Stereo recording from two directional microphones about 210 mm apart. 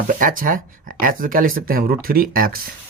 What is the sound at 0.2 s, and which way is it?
Speech, 40° right (ahead or behind).